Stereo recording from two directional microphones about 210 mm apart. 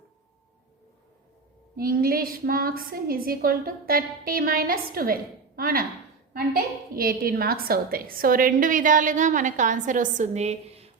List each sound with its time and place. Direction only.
1.7 s a woman's voice: 45° right (ahead or behind)